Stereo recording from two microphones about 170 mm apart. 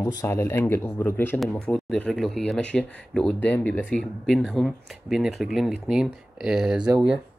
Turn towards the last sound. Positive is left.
turn(degrees=-5)  # may be behind; listen again after turning